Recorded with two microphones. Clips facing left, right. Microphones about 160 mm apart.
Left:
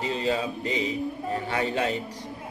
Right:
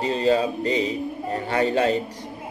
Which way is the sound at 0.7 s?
5° left (ahead or behind).